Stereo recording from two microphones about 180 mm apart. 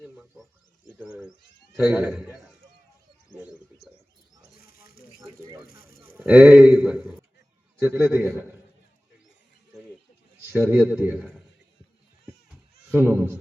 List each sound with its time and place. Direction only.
0.0 s wild animals: centre (ahead or behind)
1.7 s a man's voice: 10° right (ahead or behind)
4.6 s snake: 55° left (ahead or behind)
6.1 s a man's voice: 5° right (ahead or behind)
10.4 s a man's voice: 10° right (ahead or behind)
12.9 s a man's voice: 10° right (ahead or behind)